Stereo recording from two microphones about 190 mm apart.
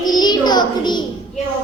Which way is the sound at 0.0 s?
20° left (ahead or behind).